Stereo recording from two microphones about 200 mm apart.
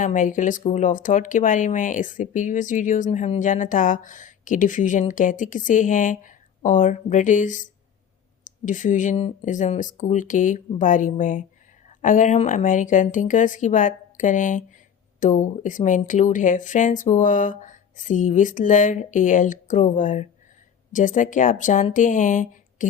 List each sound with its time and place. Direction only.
0.0 s speech: 40° left (ahead or behind)